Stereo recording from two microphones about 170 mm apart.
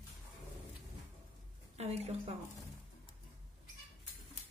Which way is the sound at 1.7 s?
40° right (ahead or behind).